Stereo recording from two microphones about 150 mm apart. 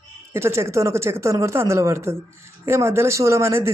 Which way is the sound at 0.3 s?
15° right (ahead or behind).